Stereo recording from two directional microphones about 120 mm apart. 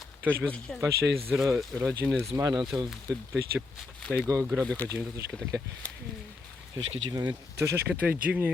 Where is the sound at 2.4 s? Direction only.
30° right (ahead or behind).